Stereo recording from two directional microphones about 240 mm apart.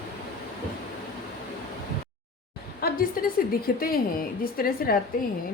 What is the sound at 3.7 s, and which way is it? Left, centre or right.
A woman's voice, left.